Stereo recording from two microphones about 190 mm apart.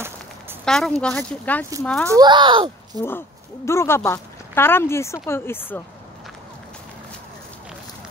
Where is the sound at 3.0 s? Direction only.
15° left (ahead or behind).